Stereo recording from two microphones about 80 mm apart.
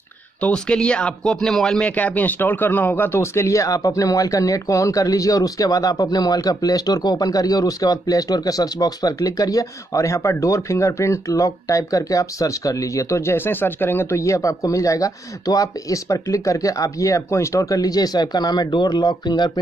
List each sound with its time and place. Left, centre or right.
0.4 s a man's voice: centre
1.9 s a man's voice: centre; by 19.6 s left